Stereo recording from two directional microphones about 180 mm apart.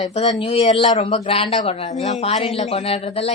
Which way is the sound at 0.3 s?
30° left (ahead or behind).